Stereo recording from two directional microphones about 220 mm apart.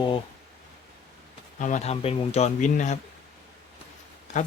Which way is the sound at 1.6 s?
35° left (ahead or behind).